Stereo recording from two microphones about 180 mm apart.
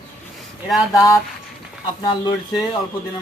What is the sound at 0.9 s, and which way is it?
Speech, 20° left (ahead or behind).